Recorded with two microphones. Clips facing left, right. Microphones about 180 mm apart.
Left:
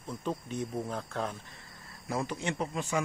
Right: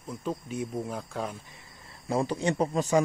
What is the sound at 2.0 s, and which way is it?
Speech, 30° right (ahead or behind).